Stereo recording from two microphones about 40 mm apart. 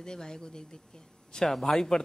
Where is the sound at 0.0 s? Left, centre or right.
Centre.